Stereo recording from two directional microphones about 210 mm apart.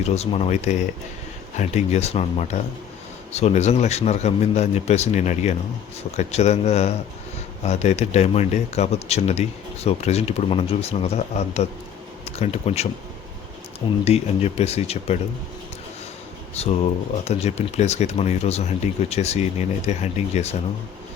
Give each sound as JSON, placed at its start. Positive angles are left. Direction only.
{"t": 0.1, "sound": "speech", "side_deg": 30}
{"t": 14.0, "sound": "speech", "side_deg": 30}
{"t": 16.6, "sound": "speech", "side_deg": 30}